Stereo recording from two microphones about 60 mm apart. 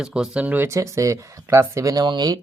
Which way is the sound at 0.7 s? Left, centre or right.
Right.